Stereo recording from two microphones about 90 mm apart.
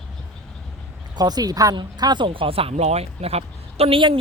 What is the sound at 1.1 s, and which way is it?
Speech, 45° right (ahead or behind).